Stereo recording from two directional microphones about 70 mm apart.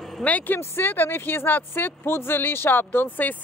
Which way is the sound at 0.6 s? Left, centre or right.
Left.